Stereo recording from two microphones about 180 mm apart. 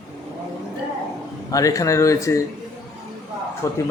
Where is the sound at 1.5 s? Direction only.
20° left (ahead or behind).